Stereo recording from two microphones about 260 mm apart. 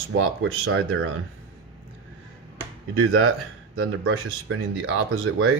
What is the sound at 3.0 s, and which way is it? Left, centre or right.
Speech, right.